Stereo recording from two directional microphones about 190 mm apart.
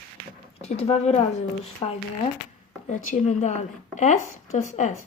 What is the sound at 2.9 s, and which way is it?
Speech, 40° left (ahead or behind).